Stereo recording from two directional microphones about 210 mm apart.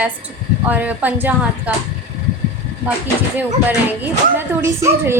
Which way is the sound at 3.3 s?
10° right (ahead or behind).